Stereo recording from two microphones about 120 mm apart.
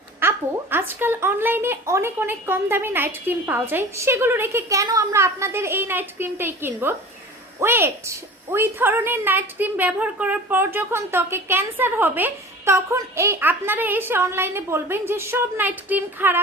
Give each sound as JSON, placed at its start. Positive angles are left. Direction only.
{"t": 0.2, "sound": "a woman's voice", "side_deg": -20}